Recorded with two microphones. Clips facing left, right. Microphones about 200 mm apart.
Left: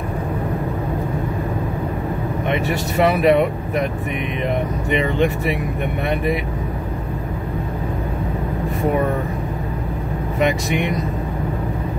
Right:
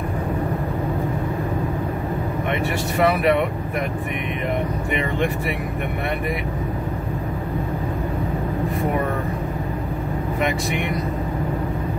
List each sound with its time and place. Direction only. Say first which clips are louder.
2.6 s speech: left 1 dB; 20° left (ahead or behind)
10.4 s speech: left 5 dB; 20° left (ahead or behind)